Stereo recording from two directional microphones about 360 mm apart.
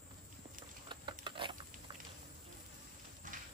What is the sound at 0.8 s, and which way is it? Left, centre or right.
Patter, centre.